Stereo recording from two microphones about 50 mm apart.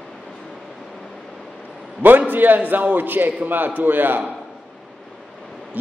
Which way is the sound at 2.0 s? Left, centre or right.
Right.